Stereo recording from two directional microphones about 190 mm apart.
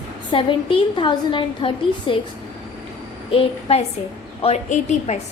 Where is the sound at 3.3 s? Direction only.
30° left (ahead or behind).